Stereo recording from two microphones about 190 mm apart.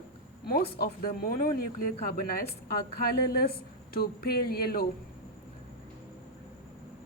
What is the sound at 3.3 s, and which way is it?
Speech, 55° left (ahead or behind).